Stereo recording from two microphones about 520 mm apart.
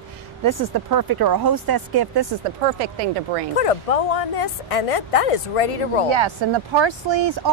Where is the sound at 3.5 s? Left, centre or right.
Left.